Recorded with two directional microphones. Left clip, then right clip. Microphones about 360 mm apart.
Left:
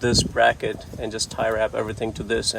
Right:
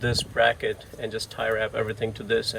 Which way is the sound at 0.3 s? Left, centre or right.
Centre.